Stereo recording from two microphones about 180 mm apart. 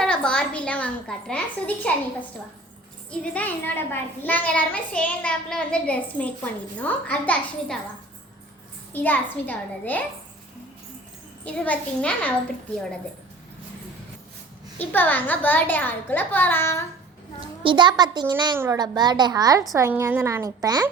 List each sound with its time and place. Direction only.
0.0 s a woman's voice: 5° left (ahead or behind)
3.1 s a child's voice: 10° left (ahead or behind)
8.9 s a child's voice: 10° left (ahead or behind)
11.4 s a child's voice: 10° left (ahead or behind)
14.8 s a child's voice: 10° left (ahead or behind)
17.6 s a woman's voice: 25° right (ahead or behind)